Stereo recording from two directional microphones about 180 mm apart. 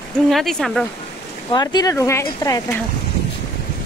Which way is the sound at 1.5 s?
20° left (ahead or behind).